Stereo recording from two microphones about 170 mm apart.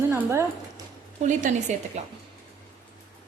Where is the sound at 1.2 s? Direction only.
45° right (ahead or behind).